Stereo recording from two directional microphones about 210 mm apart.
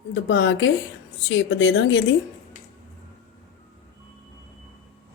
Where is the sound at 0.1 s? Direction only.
60° left (ahead or behind).